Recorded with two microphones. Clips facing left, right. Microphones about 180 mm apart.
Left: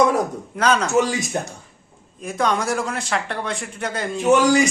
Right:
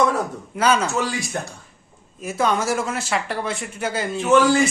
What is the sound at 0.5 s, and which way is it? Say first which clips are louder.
Speech: even; 5° right (ahead or behind).